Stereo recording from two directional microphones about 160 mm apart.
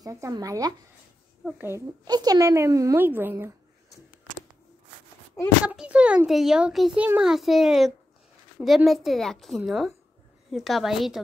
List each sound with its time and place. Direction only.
0.0 s speech: 20° right (ahead or behind)
2.0 s a child's voice: 25° right (ahead or behind)
5.7 s a child's voice: 5° right (ahead or behind)